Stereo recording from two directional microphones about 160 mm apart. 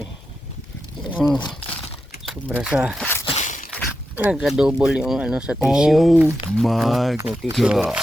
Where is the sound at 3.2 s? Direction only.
45° left (ahead or behind).